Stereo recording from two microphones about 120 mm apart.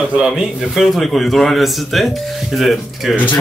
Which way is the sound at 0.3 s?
Centre (ahead or behind).